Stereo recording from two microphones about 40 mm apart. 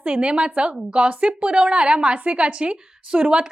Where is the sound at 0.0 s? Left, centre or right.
Right.